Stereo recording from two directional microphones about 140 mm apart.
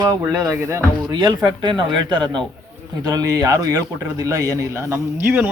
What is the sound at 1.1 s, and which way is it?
Speech, 30° right (ahead or behind).